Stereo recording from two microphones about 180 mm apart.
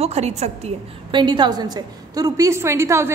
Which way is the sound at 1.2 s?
25° right (ahead or behind).